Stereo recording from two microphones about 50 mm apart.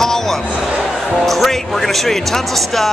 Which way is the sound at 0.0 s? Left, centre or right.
Centre.